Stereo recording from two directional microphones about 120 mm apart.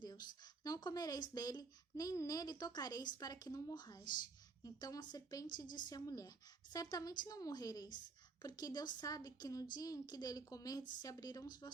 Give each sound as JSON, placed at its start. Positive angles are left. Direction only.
{"t": 0.0, "sound": "a woman's voice", "side_deg": 35}